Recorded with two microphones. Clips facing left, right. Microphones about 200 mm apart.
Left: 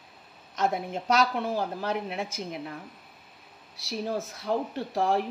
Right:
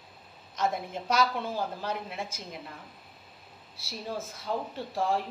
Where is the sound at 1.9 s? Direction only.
70° left (ahead or behind).